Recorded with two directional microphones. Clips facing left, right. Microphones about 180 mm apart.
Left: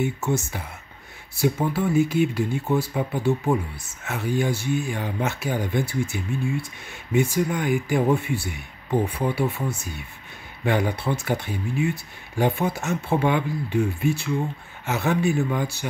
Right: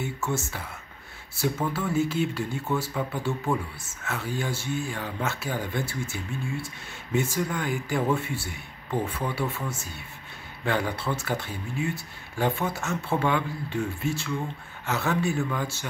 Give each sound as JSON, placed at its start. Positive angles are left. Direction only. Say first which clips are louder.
{"t": 0.4, "sound": "speech", "louder": "left 2 dB", "side_deg": 15}